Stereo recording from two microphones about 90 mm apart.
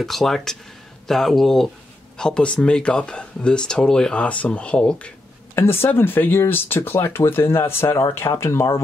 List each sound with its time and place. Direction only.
0.0 s speech: 5° left (ahead or behind)
5.5 s speech: 25° left (ahead or behind)